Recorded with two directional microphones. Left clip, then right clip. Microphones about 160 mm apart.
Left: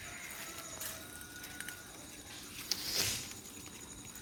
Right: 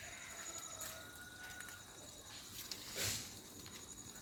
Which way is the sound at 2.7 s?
35° left (ahead or behind).